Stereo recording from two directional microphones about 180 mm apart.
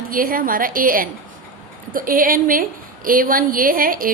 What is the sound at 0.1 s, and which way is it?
A woman's voice, 50° right (ahead or behind).